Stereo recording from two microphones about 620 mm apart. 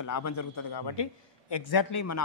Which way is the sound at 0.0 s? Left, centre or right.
Left.